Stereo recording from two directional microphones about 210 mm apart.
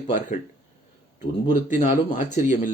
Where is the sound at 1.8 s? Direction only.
40° left (ahead or behind).